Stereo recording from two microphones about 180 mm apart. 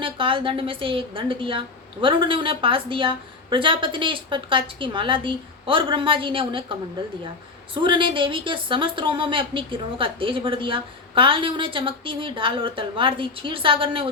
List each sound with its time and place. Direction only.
0.0 s a woman's voice: 30° right (ahead or behind)